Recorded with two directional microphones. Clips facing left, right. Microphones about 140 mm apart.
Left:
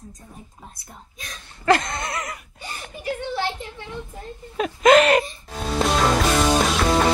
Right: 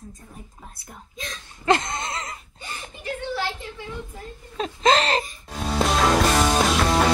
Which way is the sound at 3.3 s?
20° left (ahead or behind).